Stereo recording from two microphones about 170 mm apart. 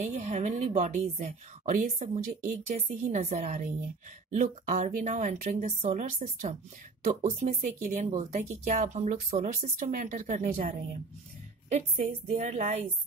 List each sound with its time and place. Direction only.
0.0 s a woman's voice: 40° right (ahead or behind)